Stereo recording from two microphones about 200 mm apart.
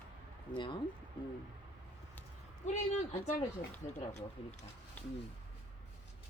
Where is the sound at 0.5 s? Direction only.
25° left (ahead or behind).